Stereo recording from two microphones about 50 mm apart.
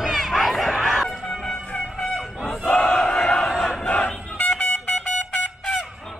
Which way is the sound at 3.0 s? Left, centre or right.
Centre.